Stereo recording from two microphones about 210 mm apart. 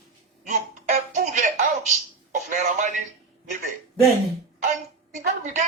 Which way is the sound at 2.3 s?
35° right (ahead or behind).